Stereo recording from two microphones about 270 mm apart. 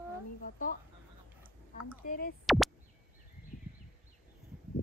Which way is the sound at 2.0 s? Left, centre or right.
Left.